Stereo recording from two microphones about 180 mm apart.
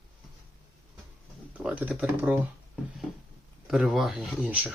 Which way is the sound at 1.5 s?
10° right (ahead or behind).